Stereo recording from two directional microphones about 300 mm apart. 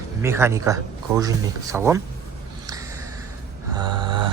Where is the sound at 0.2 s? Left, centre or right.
Centre.